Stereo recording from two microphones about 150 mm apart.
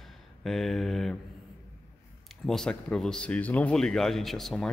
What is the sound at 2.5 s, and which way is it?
Speech, 5° left (ahead or behind).